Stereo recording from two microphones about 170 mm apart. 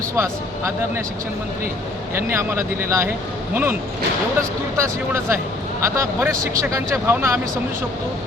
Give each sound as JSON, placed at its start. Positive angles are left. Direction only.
{"t": 0.2, "sound": "speech", "side_deg": -15}
{"t": 2.1, "sound": "speech", "side_deg": -15}
{"t": 4.8, "sound": "speech", "side_deg": -15}